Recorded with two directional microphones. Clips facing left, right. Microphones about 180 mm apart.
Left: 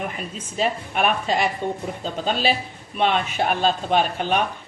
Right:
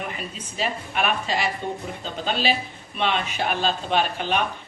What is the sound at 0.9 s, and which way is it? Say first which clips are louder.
Speech: left 3 dB; 50° left (ahead or behind).